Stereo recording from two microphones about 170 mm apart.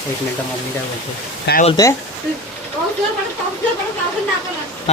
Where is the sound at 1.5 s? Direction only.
75° left (ahead or behind).